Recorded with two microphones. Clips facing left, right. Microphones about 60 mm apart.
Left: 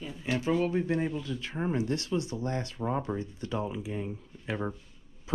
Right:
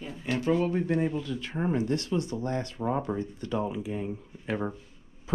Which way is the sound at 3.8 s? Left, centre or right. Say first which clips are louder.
Right 2 dB; right.